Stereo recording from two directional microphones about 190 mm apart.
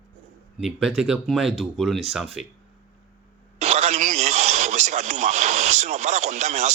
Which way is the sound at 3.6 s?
35° right (ahead or behind).